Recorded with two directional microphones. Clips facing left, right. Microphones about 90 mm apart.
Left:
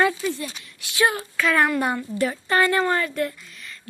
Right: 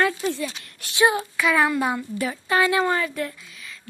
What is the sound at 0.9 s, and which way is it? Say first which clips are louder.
Speech: right 2 dB; 20° right (ahead or behind).